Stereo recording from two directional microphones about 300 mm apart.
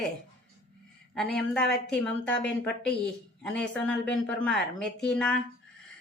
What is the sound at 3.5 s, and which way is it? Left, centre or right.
A woman's voice, centre.